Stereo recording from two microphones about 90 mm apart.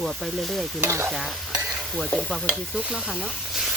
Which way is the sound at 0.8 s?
30° right (ahead or behind).